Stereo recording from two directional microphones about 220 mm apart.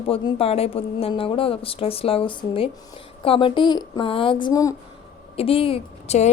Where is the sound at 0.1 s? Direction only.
25° left (ahead or behind).